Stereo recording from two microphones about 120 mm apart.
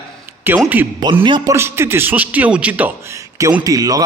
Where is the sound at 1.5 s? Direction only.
20° right (ahead or behind).